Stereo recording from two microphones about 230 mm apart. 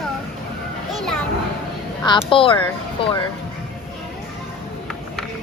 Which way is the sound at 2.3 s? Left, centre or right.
Left.